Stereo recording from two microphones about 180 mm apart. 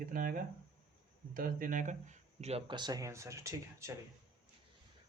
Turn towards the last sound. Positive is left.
turn(degrees=-15)  # may be behind; listen again after turning